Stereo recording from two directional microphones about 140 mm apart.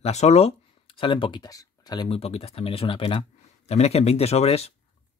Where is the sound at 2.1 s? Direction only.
45° left (ahead or behind).